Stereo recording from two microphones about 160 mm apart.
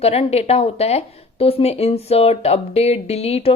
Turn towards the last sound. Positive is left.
turn(degrees=40)  # may be behind; listen again after turning